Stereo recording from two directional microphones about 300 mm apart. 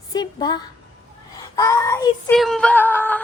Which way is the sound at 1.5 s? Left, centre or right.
Centre.